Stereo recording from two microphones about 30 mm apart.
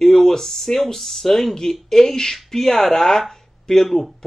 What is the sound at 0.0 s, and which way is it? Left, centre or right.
A man's voice, centre.